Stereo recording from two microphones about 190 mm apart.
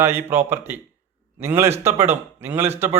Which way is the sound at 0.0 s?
10° right (ahead or behind).